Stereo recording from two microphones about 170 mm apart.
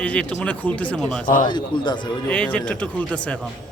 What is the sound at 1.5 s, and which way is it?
Speech, 25° left (ahead or behind).